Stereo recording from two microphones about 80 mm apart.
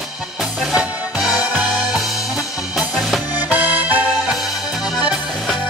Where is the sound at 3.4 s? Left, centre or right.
Right.